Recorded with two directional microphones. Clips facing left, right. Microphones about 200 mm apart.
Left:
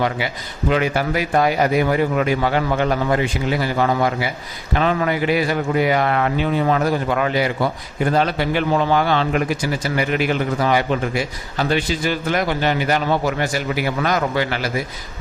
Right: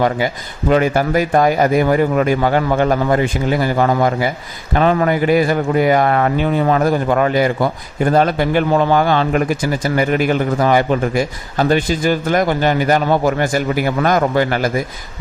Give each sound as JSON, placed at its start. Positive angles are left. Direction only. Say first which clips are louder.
{"t": 0.7, "sound": "speech", "louder": "right 5 dB", "side_deg": -45}